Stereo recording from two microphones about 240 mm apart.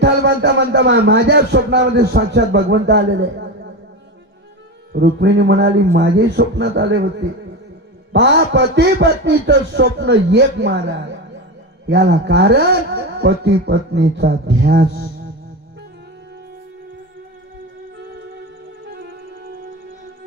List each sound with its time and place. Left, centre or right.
0.0 s speech: right
4.9 s speech: right
8.1 s speech: right
11.9 s speech: right